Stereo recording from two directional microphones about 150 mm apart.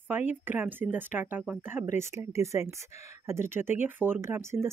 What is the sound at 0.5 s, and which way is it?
Speech, 15° right (ahead or behind).